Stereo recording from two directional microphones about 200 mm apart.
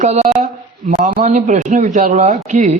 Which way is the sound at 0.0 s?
35° right (ahead or behind).